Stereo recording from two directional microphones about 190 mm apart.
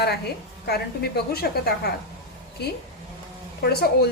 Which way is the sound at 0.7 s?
55° left (ahead or behind).